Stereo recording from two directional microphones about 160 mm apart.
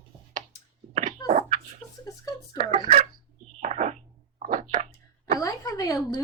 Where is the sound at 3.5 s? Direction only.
45° right (ahead or behind).